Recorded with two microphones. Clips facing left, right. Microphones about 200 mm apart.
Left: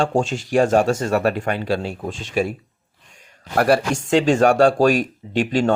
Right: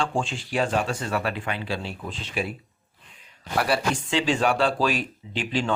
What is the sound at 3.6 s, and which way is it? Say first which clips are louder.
Speech: left 7 dB; 45° left (ahead or behind).